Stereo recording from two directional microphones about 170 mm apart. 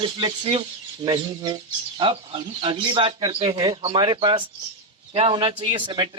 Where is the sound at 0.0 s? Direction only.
25° right (ahead or behind).